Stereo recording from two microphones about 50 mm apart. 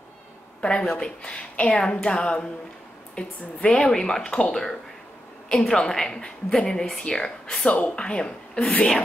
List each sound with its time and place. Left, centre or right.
0.6 s a woman's voice: centre